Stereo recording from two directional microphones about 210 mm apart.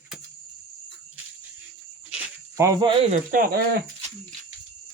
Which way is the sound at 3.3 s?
45° right (ahead or behind).